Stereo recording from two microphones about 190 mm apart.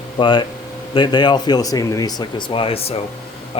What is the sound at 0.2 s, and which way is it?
Speech, 25° left (ahead or behind).